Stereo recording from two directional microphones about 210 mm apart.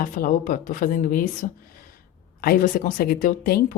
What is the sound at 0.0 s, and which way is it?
Speech, 40° left (ahead or behind).